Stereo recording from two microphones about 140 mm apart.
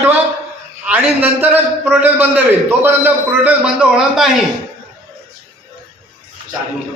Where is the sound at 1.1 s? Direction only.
15° right (ahead or behind).